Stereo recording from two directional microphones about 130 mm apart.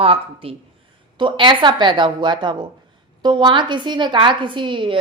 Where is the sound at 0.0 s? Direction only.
45° right (ahead or behind).